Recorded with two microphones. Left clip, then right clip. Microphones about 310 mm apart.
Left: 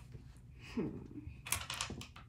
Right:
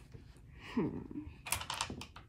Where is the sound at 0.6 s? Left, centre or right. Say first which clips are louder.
Right 4 dB; right.